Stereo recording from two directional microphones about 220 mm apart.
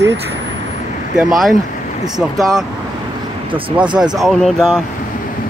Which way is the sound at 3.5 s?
20° right (ahead or behind).